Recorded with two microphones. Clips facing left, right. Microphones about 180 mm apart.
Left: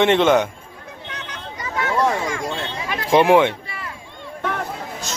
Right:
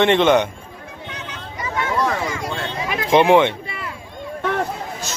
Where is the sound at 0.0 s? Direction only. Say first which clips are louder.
Even; 5° left (ahead or behind).